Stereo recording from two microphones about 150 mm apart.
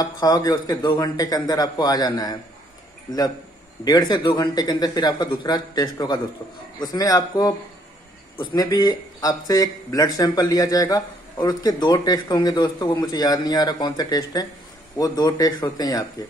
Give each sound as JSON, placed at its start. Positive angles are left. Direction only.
{"t": 0.0, "sound": "a man's voice", "side_deg": 25}
{"t": 3.8, "sound": "a man's voice", "side_deg": 30}